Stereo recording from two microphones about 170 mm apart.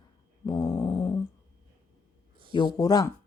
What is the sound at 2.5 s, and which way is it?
Speech, 25° left (ahead or behind).